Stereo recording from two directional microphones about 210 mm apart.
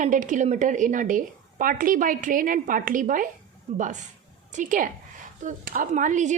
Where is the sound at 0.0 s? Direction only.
35° right (ahead or behind).